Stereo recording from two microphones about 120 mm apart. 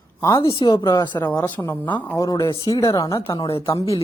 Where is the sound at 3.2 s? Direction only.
45° left (ahead or behind).